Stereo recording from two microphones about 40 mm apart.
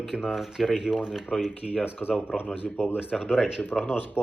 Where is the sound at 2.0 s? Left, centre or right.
Left.